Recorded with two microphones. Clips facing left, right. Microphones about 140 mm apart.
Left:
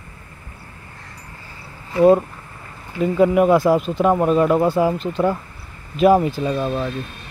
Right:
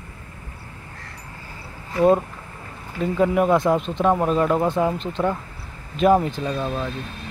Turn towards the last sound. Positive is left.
turn(degrees=5)  # may be behind; listen again after turning